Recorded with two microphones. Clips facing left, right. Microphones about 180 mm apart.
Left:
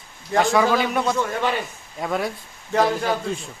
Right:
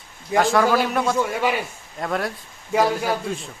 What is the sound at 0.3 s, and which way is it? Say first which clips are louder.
A man's voice: even; 10° right (ahead or behind).